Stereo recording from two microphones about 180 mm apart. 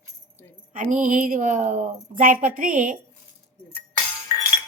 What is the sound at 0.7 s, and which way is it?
A woman's voice, 45° right (ahead or behind).